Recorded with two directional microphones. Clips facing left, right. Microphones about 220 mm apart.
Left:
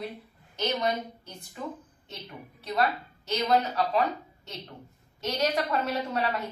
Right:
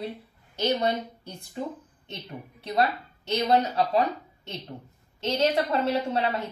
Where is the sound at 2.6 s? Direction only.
30° right (ahead or behind).